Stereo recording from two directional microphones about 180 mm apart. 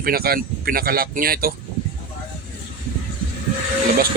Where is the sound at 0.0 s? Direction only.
55° right (ahead or behind).